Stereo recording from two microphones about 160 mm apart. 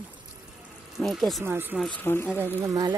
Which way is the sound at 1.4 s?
15° right (ahead or behind).